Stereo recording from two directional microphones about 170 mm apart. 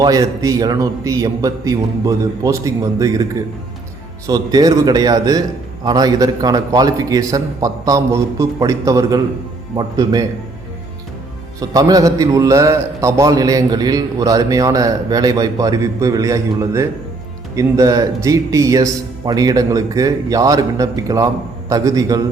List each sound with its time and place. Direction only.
0.0 s a man's voice: 20° right (ahead or behind)
11.6 s a man's voice: 20° right (ahead or behind)